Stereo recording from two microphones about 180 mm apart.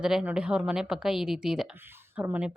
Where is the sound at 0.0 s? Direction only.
5° right (ahead or behind).